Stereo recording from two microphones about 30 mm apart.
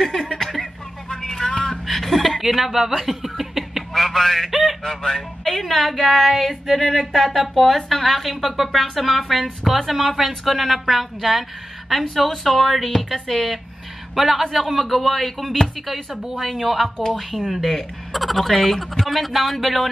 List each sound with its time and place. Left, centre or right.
0.0 s speech: centre
1.0 s vehicle: left
1.7 s a sound: centre
3.9 s a sound: centre
4.5 s speech: centre
4.8 s speech: centre
5.4 s speech: centre
12.3 s speech: centre